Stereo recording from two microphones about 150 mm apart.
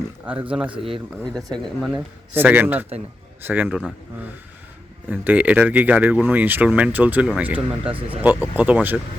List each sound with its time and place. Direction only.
0.7 s speech: 35° right (ahead or behind)
1.2 s speech: 5° left (ahead or behind)
2.3 s speech: 15° right (ahead or behind)
5.0 s speech: 10° right (ahead or behind)